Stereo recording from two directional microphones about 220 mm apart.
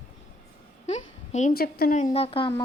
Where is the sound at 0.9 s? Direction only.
30° left (ahead or behind).